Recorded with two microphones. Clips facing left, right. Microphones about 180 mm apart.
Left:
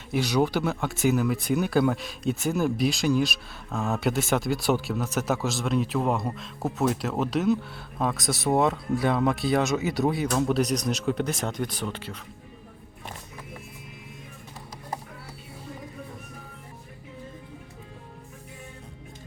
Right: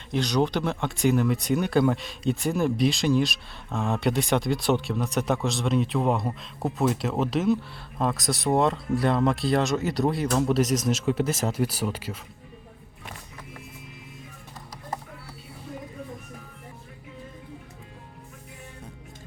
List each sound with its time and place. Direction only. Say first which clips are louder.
0.1 s speech: even; 10° left (ahead or behind); by 12.1 s 10° right (ahead or behind)